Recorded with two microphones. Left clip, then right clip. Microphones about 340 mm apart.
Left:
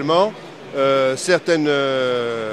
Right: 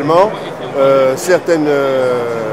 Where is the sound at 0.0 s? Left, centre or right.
Left.